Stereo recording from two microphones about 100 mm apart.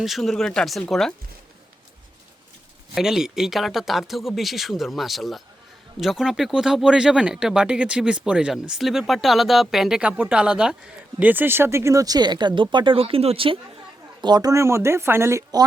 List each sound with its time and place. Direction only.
0.0 s speech: centre (ahead or behind)
2.9 s speech: 5° right (ahead or behind); by 13.6 s 65° right (ahead or behind)
14.2 s speech: 45° right (ahead or behind); by 15.4 s 25° right (ahead or behind)